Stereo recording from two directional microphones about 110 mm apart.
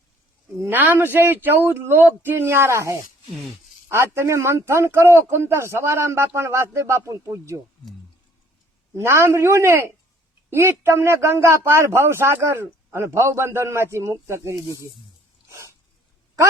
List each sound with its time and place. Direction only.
0.6 s a man's voice: 15° right (ahead or behind)
9.0 s a man's voice: 25° right (ahead or behind)
15.4 s a sound: 25° right (ahead or behind)